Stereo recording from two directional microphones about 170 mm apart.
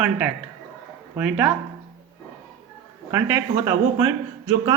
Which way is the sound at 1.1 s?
10° right (ahead or behind).